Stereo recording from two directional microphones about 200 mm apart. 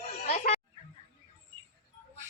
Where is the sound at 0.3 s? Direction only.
35° left (ahead or behind).